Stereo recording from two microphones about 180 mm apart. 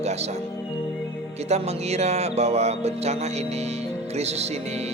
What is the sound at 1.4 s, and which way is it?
Speech, 35° right (ahead or behind).